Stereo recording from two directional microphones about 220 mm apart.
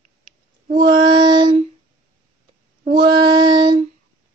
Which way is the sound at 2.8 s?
45° right (ahead or behind).